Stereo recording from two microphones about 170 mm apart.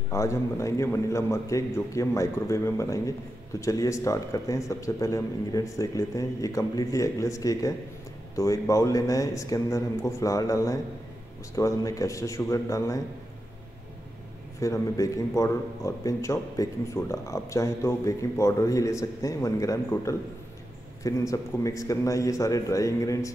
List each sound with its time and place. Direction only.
0.1 s speech: 15° left (ahead or behind)
14.6 s speech: 20° left (ahead or behind)